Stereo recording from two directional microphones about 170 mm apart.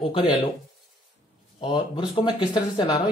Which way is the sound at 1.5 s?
30° left (ahead or behind).